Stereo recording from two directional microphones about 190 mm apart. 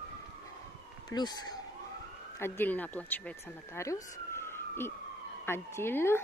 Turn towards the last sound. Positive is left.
turn(degrees=10)  # may be behind; listen again after turning